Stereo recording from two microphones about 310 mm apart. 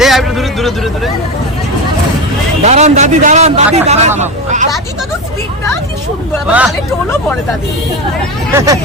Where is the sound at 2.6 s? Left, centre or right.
Right.